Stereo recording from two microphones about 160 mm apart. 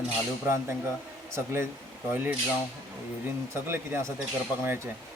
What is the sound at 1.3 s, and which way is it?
Speech, 15° right (ahead or behind).